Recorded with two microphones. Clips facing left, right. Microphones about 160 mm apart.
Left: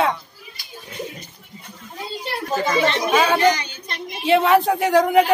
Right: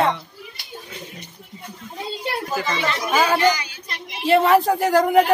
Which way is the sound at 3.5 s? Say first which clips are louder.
Left 2 dB; 30° left (ahead or behind).